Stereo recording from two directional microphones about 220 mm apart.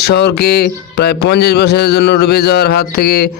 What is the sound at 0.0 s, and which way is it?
Music, 45° left (ahead or behind).